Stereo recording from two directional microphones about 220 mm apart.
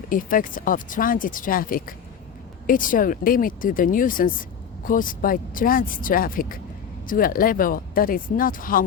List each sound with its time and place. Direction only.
0.1 s speech: 40° left (ahead or behind)